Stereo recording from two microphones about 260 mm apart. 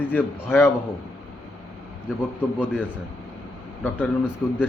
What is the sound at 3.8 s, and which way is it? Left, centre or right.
Speech, centre.